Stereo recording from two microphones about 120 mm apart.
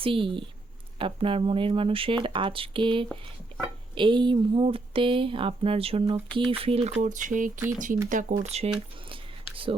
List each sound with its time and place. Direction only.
0.0 s speech: 45° right (ahead or behind)
7.0 s speech: 90° right; by 8.7 s 60° right (ahead or behind)
9.0 s a sound: 50° right (ahead or behind)